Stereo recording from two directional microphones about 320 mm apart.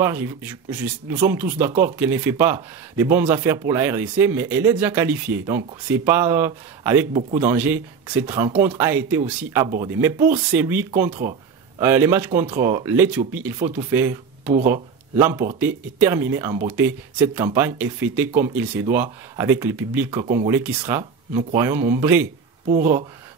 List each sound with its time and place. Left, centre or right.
0.0 s speech: centre
11.2 s speech: right
11.8 s speech: centre
22.7 s speech: right